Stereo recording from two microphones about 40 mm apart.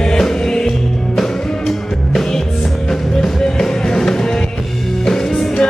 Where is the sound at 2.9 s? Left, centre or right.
Centre.